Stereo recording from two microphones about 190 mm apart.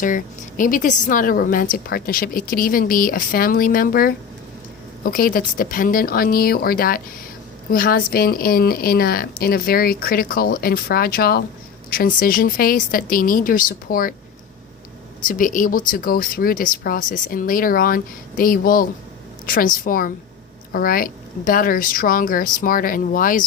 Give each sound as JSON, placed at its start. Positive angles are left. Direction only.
{"t": 0.0, "sound": "a woman's voice", "side_deg": 45}
{"t": 15.2, "sound": "a woman's voice", "side_deg": 45}